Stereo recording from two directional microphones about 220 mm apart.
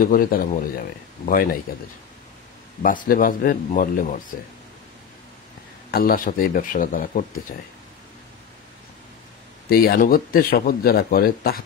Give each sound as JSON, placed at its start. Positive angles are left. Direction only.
{"t": 0.0, "sound": "speech", "side_deg": 40}
{"t": 2.8, "sound": "speech", "side_deg": 40}
{"t": 5.9, "sound": "speech", "side_deg": 40}
{"t": 9.7, "sound": "speech", "side_deg": 40}